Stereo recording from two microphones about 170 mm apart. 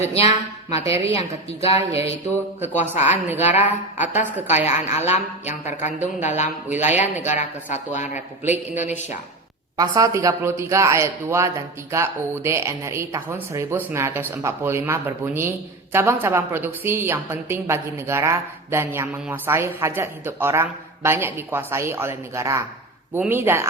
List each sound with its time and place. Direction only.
0.1 s a woman's voice: 35° left (ahead or behind)
0.8 s speech: 15° right (ahead or behind)
3.4 s a man's voice: 45° left (ahead or behind)
4.0 s speech: 10° right (ahead or behind)
4.4 s a woman's voice: 40° left (ahead or behind)
6.7 s speech: 10° right (ahead or behind)
7.3 s a man's voice: 45° left (ahead or behind)
9.7 s speech: 20° right (ahead or behind)